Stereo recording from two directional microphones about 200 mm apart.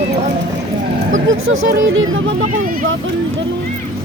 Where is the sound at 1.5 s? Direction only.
85° right.